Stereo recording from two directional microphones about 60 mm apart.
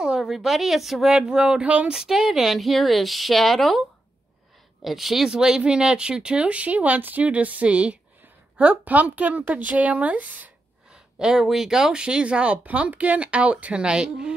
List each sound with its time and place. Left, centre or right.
0.0 s speech: centre
4.8 s speech: centre; by 10.5 s right
10.9 s speech: centre